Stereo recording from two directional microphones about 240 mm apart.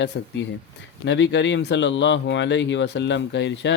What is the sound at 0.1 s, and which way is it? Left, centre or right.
Speech, left.